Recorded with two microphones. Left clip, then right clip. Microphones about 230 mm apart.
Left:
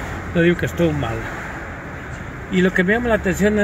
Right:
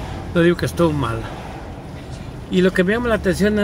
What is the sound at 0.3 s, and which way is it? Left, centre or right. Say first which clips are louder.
Speech: right 1 dB; centre.